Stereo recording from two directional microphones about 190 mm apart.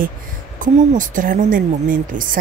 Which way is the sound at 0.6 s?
45° right (ahead or behind).